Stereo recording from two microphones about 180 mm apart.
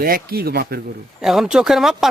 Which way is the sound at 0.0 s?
55° right (ahead or behind).